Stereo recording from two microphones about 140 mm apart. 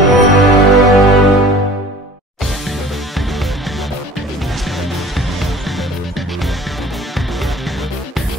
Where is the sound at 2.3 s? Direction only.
Centre (ahead or behind).